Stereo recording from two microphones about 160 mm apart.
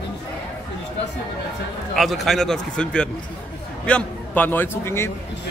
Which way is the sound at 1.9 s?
Centre (ahead or behind).